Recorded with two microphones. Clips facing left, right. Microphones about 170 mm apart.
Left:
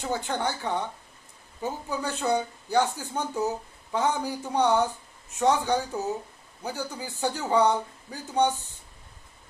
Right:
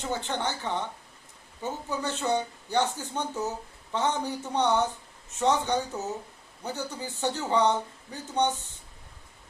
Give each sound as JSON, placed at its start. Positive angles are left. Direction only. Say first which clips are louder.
{"t": 0.0, "sound": "speech", "louder": "left 2 dB", "side_deg": 10}